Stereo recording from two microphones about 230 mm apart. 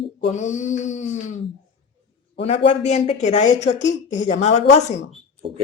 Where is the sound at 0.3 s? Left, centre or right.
Left.